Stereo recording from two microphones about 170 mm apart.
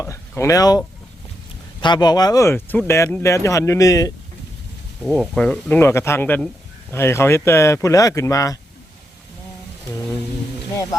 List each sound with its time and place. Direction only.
0.0 s speech: 15° left (ahead or behind)
1.8 s speech: 25° left (ahead or behind)
5.0 s speech: centre (ahead or behind); by 8.5 s 20° left (ahead or behind)